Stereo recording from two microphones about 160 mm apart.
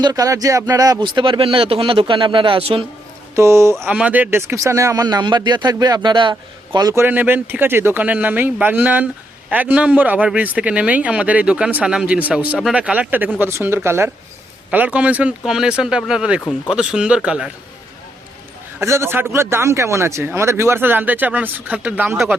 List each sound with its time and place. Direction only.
0.0 s speech: 20° right (ahead or behind)
3.3 s speech: 15° right (ahead or behind)
18.8 s speech: 15° right (ahead or behind)